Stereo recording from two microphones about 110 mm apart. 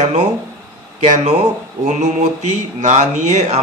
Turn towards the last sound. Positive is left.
turn(degrees=-90)